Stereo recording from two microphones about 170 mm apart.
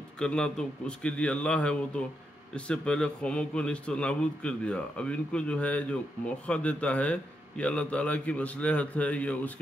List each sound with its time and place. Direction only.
0.2 s a man's voice: 5° left (ahead or behind)